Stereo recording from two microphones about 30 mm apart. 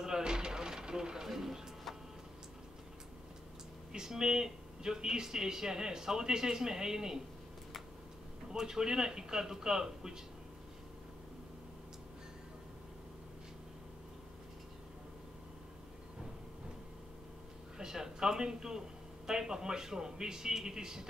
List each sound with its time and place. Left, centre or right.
0.0 s a sound: right
1.2 s music: centre
3.9 s speech: centre
8.5 s speech: centre
17.7 s a man's voice: right